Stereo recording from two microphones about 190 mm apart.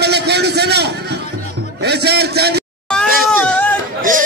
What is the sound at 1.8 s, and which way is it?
Speech, 60° right (ahead or behind).